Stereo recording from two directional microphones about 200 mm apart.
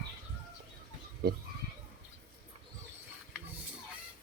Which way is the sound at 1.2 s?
50° right (ahead or behind).